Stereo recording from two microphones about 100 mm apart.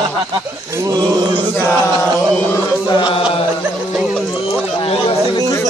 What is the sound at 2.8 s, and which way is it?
Chant, 50° left (ahead or behind).